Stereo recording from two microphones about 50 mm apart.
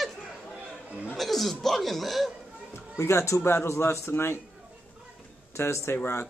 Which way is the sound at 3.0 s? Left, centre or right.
Left.